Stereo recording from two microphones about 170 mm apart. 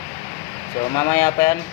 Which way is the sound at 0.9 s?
25° left (ahead or behind).